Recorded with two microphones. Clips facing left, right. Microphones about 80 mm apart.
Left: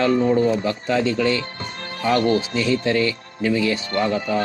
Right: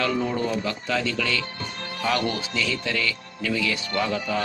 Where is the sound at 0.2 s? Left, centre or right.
Centre.